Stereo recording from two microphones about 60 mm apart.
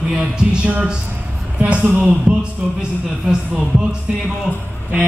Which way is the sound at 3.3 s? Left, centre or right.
Centre.